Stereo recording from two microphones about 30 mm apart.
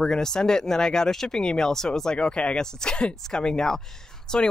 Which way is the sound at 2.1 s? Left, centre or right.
Left.